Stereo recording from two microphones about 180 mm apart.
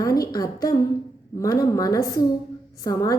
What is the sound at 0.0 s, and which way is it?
A woman's voice, 20° left (ahead or behind).